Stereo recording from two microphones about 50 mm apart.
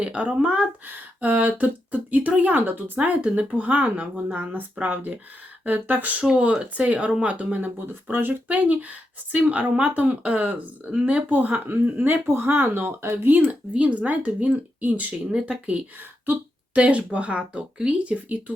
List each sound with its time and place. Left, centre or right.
0.0 s speech: right
0.9 s speech: right
11.3 s speech: right
12.0 s speech: right
13.5 s speech: right
15.3 s speech: right